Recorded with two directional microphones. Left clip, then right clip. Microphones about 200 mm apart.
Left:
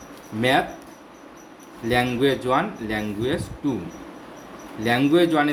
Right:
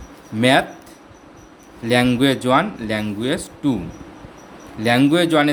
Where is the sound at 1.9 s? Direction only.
55° right (ahead or behind).